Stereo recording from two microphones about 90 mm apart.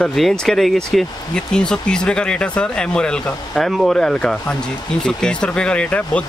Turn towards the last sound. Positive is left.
turn(degrees=10)  # may be behind; listen again after turning